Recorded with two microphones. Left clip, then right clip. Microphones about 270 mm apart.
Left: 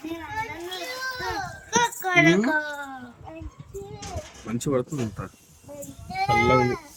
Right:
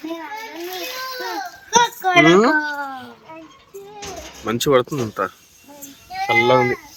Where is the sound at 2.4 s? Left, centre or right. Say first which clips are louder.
Right 8 dB; centre.